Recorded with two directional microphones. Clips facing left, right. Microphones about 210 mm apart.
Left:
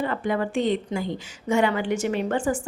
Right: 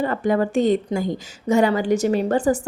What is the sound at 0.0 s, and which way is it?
A woman's voice, 40° right (ahead or behind).